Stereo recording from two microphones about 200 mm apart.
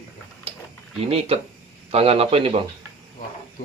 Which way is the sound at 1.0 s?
30° right (ahead or behind).